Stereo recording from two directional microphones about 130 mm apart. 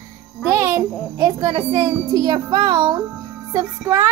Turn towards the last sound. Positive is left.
turn(degrees=-25)  # may be behind; listen again after turning